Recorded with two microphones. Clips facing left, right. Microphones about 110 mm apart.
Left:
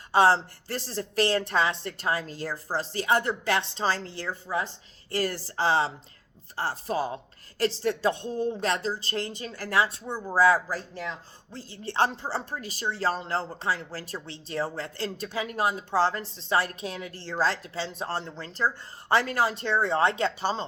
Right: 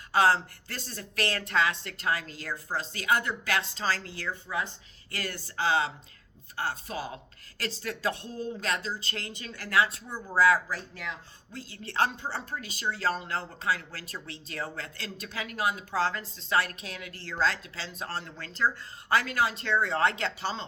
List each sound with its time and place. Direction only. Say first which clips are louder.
0.1 s speech: left 3 dB; 30° left (ahead or behind)